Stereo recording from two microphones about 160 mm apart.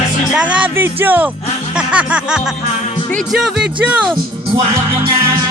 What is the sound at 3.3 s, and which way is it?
Speech, 5° right (ahead or behind).